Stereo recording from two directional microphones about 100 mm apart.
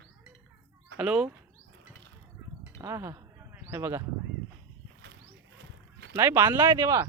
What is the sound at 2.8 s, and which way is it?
Speech, 30° right (ahead or behind).